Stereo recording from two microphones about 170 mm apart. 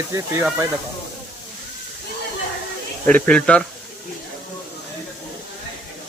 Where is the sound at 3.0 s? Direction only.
5° left (ahead or behind).